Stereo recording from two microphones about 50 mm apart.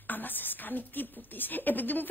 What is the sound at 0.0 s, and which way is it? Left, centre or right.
A man's voice, left.